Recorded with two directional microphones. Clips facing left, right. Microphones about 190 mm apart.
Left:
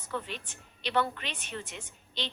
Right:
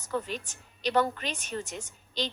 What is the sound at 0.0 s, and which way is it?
A woman's voice, 40° right (ahead or behind).